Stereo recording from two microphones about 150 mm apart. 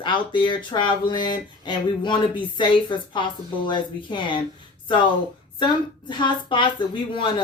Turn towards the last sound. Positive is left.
turn(degrees=35)  # may be behind; listen again after turning